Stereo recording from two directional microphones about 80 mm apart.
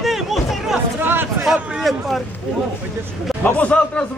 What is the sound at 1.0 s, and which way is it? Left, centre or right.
Speech, right.